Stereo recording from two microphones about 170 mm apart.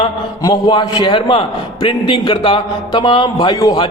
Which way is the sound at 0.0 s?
30° left (ahead or behind).